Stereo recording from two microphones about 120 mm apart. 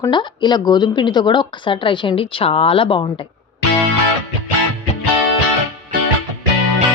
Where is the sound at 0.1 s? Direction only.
40° left (ahead or behind).